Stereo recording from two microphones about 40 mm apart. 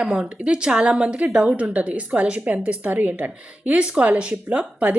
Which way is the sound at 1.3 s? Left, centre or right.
Right.